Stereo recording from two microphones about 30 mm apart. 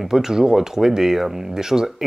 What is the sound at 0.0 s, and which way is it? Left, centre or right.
Speech, centre.